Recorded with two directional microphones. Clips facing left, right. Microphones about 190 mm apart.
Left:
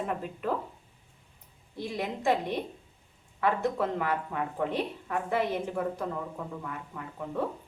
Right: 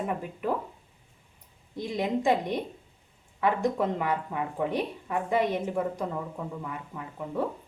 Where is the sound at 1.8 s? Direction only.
15° right (ahead or behind).